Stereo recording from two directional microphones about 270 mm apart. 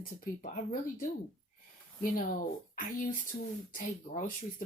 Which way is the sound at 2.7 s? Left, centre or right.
Left.